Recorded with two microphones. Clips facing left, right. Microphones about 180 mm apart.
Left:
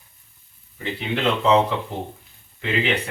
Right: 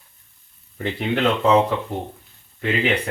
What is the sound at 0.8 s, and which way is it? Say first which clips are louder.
Speech: right 4 dB; 50° right (ahead or behind).